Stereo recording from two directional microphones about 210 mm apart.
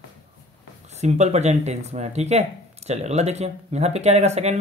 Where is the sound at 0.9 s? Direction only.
30° right (ahead or behind).